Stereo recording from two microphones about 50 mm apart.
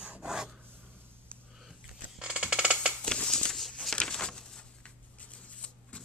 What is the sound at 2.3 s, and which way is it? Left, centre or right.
Music, right.